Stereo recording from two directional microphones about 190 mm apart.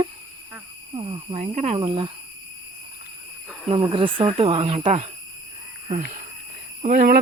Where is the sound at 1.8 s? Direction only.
25° right (ahead or behind).